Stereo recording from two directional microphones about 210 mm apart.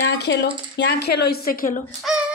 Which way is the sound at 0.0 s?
55° left (ahead or behind).